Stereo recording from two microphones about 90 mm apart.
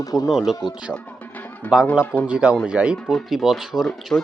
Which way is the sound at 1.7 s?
20° left (ahead or behind).